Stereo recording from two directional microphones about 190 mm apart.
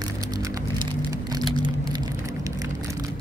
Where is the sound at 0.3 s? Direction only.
20° right (ahead or behind).